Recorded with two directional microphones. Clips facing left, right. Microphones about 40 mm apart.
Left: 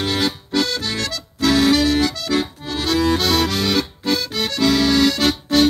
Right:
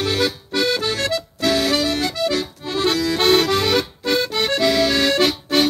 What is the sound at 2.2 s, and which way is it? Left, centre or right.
Accordion, right.